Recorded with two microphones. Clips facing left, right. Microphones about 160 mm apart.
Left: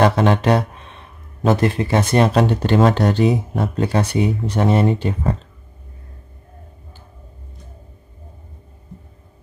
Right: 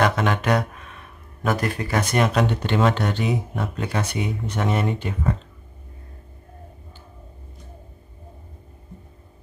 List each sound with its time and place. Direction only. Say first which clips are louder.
0.0 s speech: left 6 dB; 30° left (ahead or behind)